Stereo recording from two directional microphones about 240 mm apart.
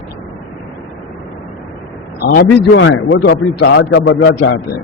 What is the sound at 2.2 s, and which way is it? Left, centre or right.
A man's voice, left.